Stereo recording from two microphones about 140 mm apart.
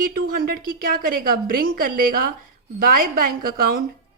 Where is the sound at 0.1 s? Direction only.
85° right.